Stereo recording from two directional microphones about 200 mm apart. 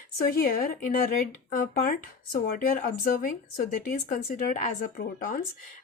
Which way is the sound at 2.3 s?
45° left (ahead or behind).